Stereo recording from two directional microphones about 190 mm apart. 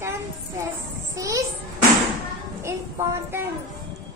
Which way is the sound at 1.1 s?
15° right (ahead or behind).